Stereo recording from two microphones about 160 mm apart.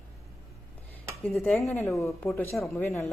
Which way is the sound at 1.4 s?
15° left (ahead or behind).